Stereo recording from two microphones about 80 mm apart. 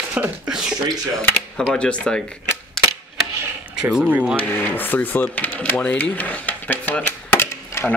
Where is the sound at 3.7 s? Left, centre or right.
Centre.